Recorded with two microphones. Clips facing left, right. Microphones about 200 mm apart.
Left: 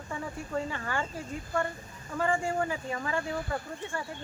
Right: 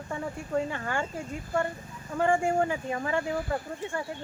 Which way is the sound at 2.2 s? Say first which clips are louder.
Right 4 dB; 25° right (ahead or behind).